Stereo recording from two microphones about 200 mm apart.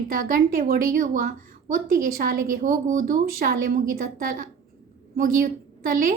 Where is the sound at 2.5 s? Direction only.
40° right (ahead or behind).